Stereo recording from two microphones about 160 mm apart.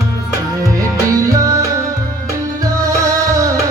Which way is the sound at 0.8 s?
20° right (ahead or behind).